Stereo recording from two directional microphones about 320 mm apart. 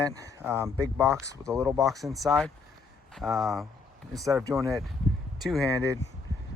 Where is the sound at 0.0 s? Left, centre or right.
Centre.